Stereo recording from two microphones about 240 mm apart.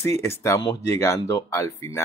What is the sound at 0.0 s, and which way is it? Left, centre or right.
Speech, centre.